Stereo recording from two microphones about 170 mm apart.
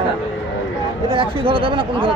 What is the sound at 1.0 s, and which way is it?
Speech, 35° right (ahead or behind).